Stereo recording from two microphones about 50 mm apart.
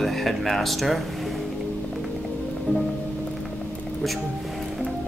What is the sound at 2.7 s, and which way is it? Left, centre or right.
Music, left.